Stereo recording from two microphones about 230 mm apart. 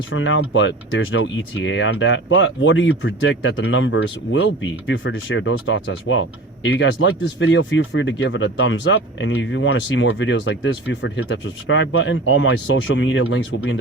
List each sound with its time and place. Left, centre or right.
0.1 s speech: left